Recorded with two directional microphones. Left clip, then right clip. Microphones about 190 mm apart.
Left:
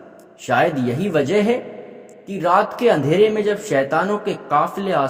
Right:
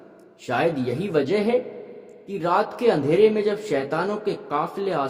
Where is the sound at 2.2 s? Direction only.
15° left (ahead or behind).